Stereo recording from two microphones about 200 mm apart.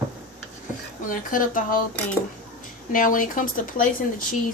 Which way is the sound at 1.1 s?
45° left (ahead or behind).